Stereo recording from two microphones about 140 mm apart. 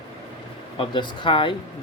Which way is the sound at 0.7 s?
35° left (ahead or behind).